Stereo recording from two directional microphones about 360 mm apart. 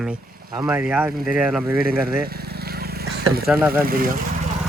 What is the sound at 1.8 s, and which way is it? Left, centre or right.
Vehicle, right.